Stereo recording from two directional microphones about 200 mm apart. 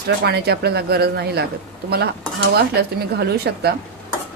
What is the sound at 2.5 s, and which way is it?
Speech, 55° right (ahead or behind).